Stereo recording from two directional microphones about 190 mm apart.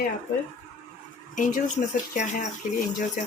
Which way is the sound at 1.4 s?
40° left (ahead or behind).